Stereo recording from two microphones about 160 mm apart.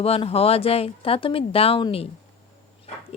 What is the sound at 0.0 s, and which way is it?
Speech, 35° left (ahead or behind).